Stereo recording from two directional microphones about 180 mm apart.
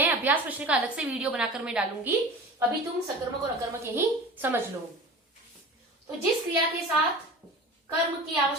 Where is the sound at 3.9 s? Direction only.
10° right (ahead or behind).